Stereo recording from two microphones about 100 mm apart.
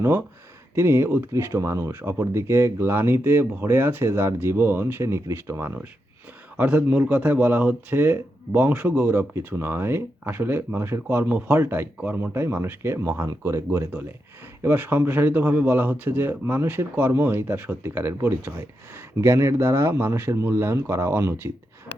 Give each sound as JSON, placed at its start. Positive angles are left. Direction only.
{"t": 0.0, "sound": "speech", "side_deg": -25}